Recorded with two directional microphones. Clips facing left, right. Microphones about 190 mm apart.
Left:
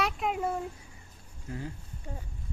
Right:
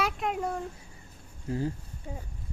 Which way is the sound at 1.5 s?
30° right (ahead or behind).